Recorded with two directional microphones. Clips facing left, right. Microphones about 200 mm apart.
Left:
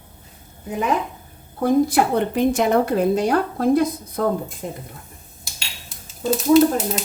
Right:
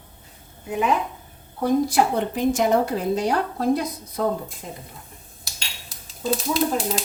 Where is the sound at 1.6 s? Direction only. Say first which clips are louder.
Left 3 dB; 55° left (ahead or behind).